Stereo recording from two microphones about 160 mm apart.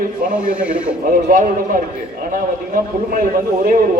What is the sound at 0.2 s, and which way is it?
Speech, 60° right (ahead or behind).